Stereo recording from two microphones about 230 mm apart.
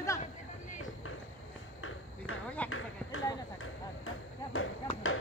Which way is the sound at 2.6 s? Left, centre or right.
Left.